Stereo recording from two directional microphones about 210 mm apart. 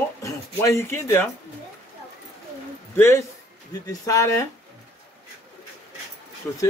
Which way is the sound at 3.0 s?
15° left (ahead or behind).